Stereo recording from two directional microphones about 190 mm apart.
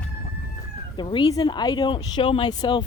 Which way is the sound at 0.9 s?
25° left (ahead or behind).